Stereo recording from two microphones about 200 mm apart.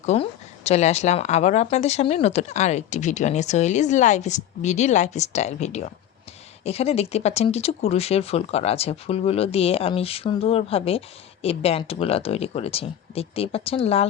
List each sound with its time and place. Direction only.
0.0 s speech: 35° left (ahead or behind)